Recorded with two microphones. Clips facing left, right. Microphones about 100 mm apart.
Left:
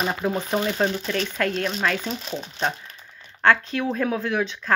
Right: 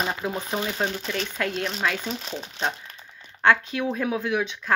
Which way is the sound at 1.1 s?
20° right (ahead or behind).